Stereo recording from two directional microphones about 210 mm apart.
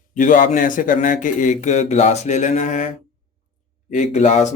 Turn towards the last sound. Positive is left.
turn(degrees=35)  # may be behind; listen again after turning